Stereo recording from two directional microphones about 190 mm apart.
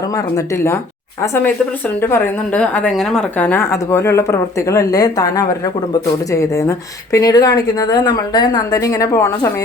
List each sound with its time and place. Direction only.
0.1 s a woman's voice: 15° left (ahead or behind)